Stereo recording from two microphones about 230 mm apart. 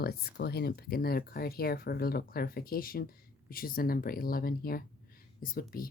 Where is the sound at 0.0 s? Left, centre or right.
Left.